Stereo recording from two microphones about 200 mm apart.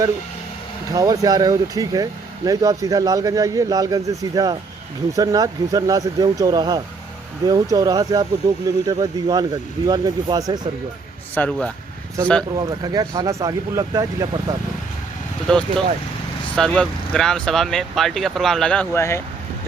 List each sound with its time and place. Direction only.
0.9 s speech: 15° right (ahead or behind)
11.3 s speech: 5° left (ahead or behind)
12.5 s speech: 20° right (ahead or behind)
16.6 s speech: 5° left (ahead or behind)